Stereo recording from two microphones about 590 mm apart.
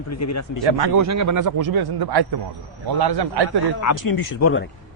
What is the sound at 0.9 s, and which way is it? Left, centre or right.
Speech, right.